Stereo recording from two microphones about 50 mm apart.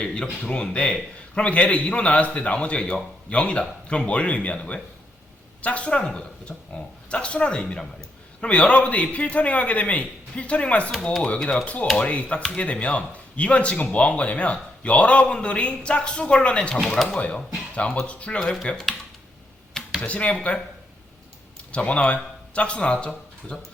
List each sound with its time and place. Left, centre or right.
0.0 s speech: left
18.3 s speech: centre
20.0 s speech: left
21.7 s speech: left